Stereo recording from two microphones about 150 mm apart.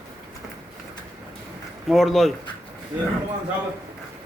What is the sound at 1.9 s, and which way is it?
Speech, centre (ahead or behind).